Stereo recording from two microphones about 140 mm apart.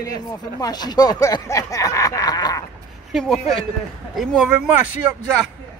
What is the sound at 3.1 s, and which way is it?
Speech, centre (ahead or behind).